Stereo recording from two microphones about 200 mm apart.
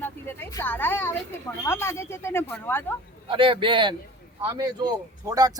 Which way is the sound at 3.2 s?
25° right (ahead or behind).